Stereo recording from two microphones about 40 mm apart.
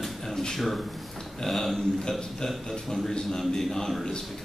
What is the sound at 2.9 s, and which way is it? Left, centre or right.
Speech, centre.